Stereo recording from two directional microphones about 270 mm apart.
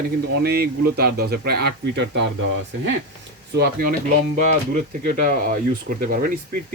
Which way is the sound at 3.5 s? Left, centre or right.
Right.